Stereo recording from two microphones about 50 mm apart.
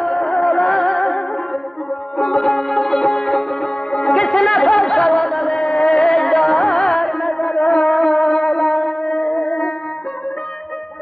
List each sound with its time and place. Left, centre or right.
0.0 s music: centre
5.6 s a sound: left
5.9 s music: centre